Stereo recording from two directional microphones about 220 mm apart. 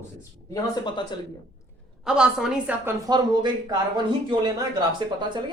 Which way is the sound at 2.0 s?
Centre (ahead or behind).